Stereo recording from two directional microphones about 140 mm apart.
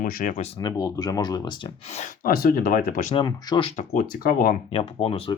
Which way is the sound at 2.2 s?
90° left.